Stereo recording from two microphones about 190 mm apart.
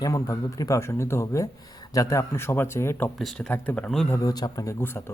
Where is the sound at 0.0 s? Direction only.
20° left (ahead or behind).